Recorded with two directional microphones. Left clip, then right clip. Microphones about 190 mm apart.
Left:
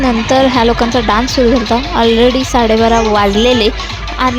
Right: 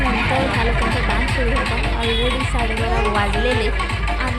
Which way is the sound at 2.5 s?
55° left (ahead or behind).